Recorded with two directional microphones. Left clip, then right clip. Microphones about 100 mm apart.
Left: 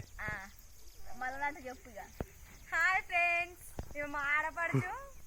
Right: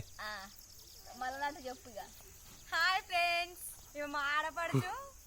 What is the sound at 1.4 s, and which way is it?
Speech, 50° right (ahead or behind).